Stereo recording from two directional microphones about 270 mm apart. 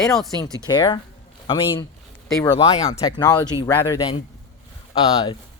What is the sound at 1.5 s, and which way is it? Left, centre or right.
Speech, centre.